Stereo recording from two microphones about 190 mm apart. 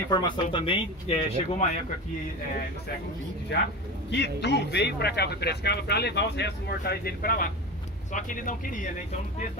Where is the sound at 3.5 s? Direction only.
60° left (ahead or behind); by 9.5 s 40° left (ahead or behind).